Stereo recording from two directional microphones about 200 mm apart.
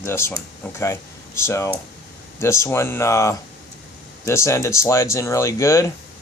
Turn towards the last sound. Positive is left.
turn(degrees=15)  # may be behind; listen again after turning